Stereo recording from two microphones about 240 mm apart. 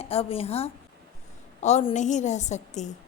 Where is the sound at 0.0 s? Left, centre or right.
Left.